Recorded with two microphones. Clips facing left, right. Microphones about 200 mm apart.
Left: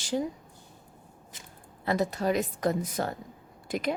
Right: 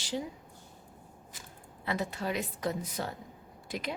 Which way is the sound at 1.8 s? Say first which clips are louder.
Left 7 dB; 40° left (ahead or behind).